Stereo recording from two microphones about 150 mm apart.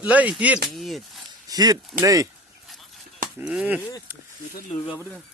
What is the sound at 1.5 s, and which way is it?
Speech, 25° right (ahead or behind).